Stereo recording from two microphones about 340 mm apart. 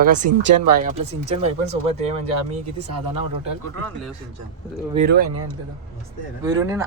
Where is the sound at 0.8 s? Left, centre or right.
Centre.